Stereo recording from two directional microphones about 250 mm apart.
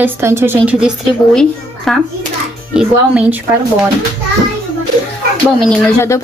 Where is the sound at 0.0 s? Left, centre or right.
Centre.